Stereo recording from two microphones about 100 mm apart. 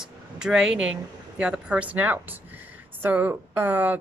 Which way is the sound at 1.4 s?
10° right (ahead or behind).